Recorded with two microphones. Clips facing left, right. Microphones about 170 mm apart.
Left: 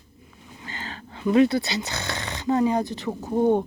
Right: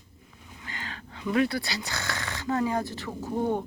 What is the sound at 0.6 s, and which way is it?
Speech, 30° left (ahead or behind).